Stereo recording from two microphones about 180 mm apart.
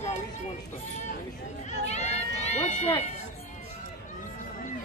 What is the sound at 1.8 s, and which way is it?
Speech, 40° left (ahead or behind).